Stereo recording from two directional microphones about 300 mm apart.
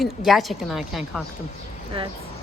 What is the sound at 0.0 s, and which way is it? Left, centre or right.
A woman's voice, centre.